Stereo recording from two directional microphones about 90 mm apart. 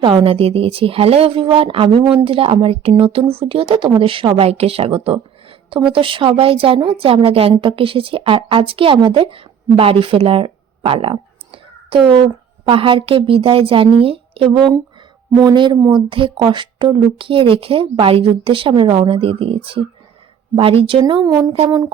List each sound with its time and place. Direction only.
0.0 s speech: 75° right (ahead or behind)
2.2 s a woman's voice: 90° right
5.0 s a sound: 80° right
5.9 s a woman's voice: 75° right (ahead or behind); by 9.0 s 90° right
9.0 s a woman's voice: 70° right (ahead or behind); by 14.5 s 90° right
15.3 s speech: 45° right (ahead or behind)
15.5 s speech: 60° right (ahead or behind); by 18.7 s 80° right
18.7 s a woman's voice: 55° right (ahead or behind); by 19.8 s 90° right
21.1 s a woman's voice: 50° right (ahead or behind)